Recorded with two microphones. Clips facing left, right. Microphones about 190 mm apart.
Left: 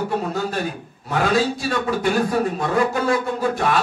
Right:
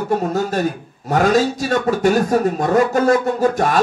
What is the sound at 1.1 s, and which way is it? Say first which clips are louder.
A man's voice: right 4 dB; 45° right (ahead or behind).